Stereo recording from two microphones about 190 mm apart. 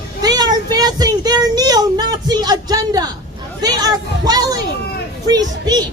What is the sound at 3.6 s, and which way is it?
Hubbub, 20° right (ahead or behind).